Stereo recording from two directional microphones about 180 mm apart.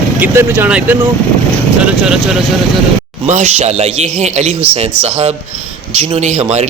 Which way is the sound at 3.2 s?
40° right (ahead or behind).